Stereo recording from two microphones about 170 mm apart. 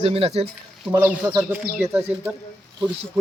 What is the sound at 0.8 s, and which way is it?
Speech, 10° right (ahead or behind).